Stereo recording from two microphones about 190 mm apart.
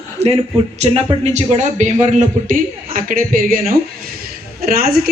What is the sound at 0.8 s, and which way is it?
A man's voice, 35° right (ahead or behind).